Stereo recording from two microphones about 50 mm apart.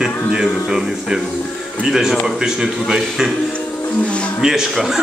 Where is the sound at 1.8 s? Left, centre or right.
Centre.